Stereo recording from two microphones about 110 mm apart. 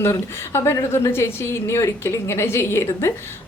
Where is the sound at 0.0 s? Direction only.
25° left (ahead or behind).